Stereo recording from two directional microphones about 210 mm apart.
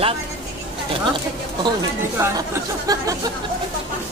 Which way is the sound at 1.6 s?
15° right (ahead or behind).